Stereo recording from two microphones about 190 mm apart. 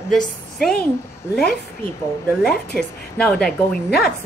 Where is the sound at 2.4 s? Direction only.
5° left (ahead or behind).